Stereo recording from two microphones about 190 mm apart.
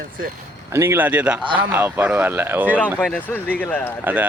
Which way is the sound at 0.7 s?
15° right (ahead or behind).